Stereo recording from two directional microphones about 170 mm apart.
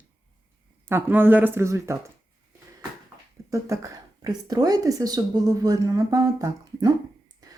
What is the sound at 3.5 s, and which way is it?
Speech, 20° right (ahead or behind).